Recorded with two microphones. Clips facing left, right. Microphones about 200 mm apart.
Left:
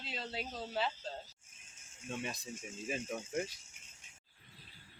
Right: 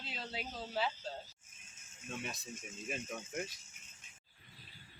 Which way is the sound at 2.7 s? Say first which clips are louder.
Left 3 dB; 30° left (ahead or behind).